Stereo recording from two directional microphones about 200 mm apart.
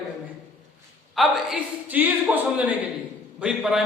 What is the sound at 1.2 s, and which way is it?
A man's voice, 5° right (ahead or behind).